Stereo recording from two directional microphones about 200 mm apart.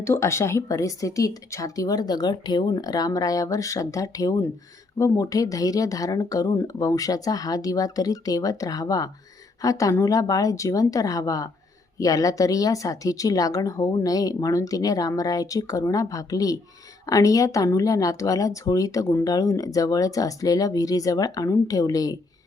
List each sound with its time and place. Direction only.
0.0 s speech: 15° left (ahead or behind)